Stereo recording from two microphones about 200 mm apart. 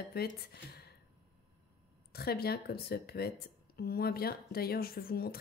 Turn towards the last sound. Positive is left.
turn(degrees=50)  # may be behind; listen again after turning